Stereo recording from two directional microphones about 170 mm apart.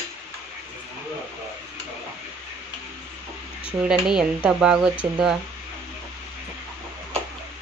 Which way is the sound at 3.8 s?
5° right (ahead or behind).